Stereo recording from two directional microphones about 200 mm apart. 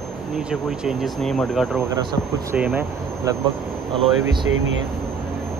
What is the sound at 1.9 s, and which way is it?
Speech, 25° right (ahead or behind).